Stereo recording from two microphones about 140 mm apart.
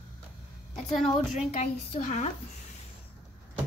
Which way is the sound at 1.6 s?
60° left (ahead or behind).